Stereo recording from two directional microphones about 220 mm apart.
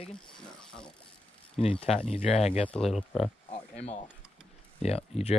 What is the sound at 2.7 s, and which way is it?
Speech, 5° left (ahead or behind).